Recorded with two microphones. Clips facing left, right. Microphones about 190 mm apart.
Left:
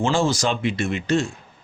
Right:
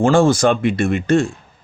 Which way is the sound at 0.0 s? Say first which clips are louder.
Right 8 dB; 55° right (ahead or behind).